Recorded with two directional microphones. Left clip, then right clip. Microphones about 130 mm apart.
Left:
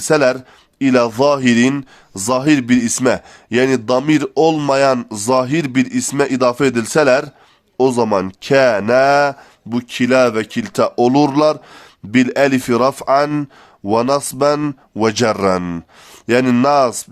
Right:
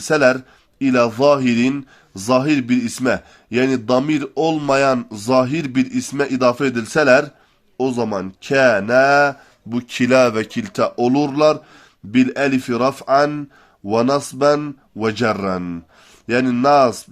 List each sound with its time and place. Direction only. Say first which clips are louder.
0.1 s speech: left 1 dB; 40° left (ahead or behind)
9.7 s speech: left 1 dB; 15° left (ahead or behind)
10.5 s speech: left 3 dB; 35° left (ahead or behind)
10.9 s a man's voice: left 7 dB; 55° left (ahead or behind)
16.2 s speech: left 3 dB; 55° left (ahead or behind)